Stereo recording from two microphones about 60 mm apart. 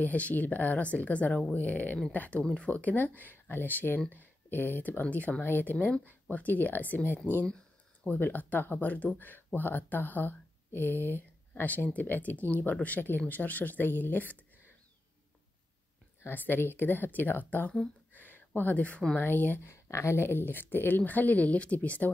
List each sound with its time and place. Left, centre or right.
0.0 s speech: left
5.0 s speech: left
16.3 s speech: left
18.1 s a sound: left
19.1 s speech: left
19.7 s speech: left